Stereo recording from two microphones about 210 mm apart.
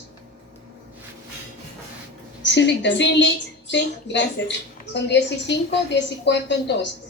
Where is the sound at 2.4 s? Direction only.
55° left (ahead or behind).